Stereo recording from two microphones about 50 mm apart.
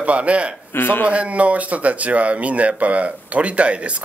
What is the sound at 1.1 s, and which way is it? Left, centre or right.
Speech, right.